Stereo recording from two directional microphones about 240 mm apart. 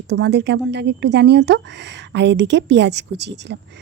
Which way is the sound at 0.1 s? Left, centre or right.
Right.